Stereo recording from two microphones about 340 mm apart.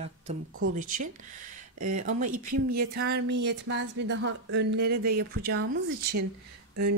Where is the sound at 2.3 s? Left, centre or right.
Right.